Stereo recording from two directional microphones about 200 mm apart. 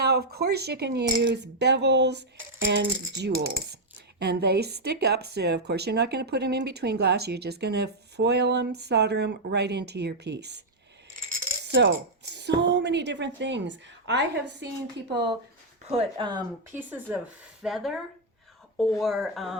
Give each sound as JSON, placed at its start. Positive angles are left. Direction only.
{"t": 0.0, "sound": "speech", "side_deg": -55}
{"t": 11.6, "sound": "speech", "side_deg": -65}
{"t": 15.8, "sound": "speech", "side_deg": -30}
{"t": 16.7, "sound": "speech", "side_deg": -10}